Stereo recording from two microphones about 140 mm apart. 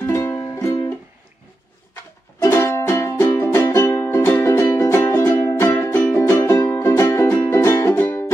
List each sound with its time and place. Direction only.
0.0 s music: 15° left (ahead or behind)
2.4 s music: 20° left (ahead or behind)